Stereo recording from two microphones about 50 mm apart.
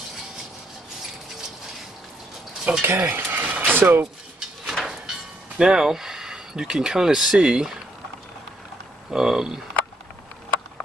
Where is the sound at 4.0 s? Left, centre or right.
Centre.